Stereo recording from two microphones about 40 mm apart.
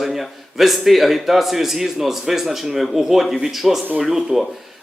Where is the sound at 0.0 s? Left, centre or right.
Centre.